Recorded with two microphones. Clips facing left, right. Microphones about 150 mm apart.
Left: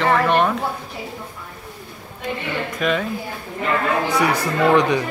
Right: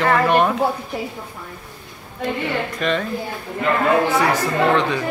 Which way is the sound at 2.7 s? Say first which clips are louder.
Left 2 dB; 5° left (ahead or behind).